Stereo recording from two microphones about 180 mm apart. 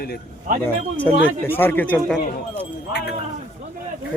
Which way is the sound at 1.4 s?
10° left (ahead or behind).